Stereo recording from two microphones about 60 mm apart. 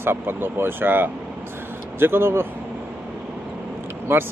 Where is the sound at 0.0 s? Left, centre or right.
Right.